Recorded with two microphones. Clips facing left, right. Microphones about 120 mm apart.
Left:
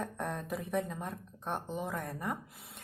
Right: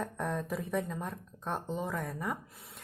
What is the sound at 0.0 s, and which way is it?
Speech, centre (ahead or behind).